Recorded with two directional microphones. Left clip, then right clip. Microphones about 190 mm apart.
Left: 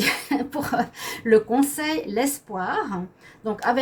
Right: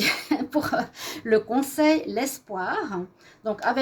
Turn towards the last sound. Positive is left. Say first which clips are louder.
# left 2 dB
turn(degrees=-40)  # may be behind; listen again after turning